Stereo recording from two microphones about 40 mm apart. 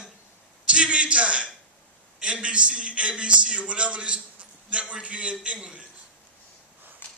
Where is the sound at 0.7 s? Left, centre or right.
Right.